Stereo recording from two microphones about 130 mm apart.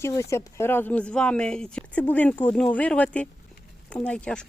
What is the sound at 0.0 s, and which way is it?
A woman's voice, 20° left (ahead or behind).